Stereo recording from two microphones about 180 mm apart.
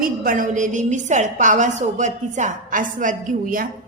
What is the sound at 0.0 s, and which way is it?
A woman's voice, 50° right (ahead or behind).